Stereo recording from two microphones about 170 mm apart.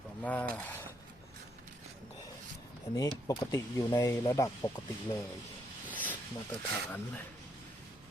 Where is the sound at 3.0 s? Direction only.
20° left (ahead or behind).